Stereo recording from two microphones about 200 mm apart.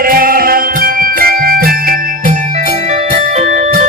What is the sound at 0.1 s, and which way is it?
Music, 45° right (ahead or behind).